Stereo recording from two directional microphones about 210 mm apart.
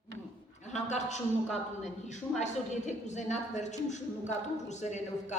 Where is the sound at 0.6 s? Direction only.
35° left (ahead or behind).